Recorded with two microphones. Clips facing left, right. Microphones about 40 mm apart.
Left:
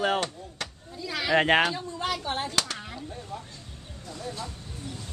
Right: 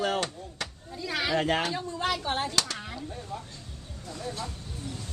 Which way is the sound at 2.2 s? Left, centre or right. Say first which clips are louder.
Right 1 dB; centre.